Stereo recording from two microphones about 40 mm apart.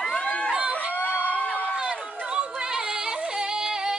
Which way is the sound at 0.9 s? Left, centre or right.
Left.